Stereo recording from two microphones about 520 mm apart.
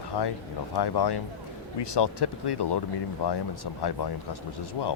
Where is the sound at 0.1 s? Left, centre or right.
Left.